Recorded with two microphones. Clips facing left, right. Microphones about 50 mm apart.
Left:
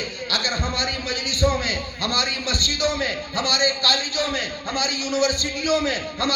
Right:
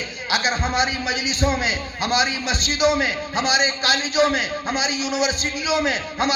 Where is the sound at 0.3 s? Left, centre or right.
Right.